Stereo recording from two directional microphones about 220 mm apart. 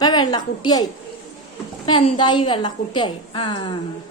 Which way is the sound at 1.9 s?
20° left (ahead or behind).